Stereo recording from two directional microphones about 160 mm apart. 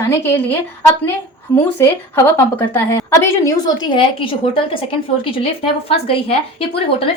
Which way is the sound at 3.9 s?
35° left (ahead or behind).